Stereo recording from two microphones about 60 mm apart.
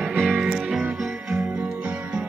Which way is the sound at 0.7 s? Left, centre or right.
Centre.